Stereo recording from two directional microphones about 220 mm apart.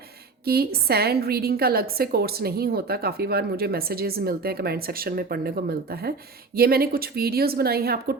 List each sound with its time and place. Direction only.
0.4 s a woman's voice: 45° right (ahead or behind)